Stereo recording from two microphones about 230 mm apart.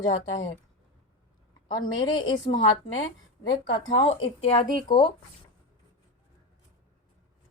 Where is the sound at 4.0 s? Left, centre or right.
Left.